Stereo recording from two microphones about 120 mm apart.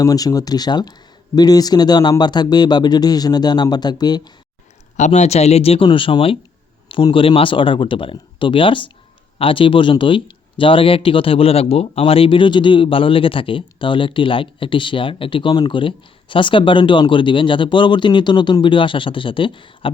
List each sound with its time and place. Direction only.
0.0 s speech: 30° left (ahead or behind)
4.9 s speech: 75° left (ahead or behind); by 19.9 s 45° left (ahead or behind)